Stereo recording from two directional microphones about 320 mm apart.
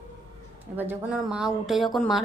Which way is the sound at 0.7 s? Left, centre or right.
Centre.